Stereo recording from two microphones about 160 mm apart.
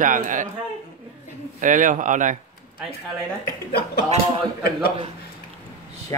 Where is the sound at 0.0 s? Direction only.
55° right (ahead or behind).